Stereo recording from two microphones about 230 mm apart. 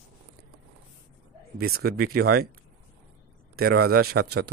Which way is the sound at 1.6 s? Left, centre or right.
Right.